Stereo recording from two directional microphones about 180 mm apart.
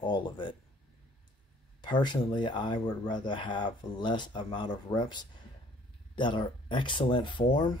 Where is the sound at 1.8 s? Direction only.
25° left (ahead or behind).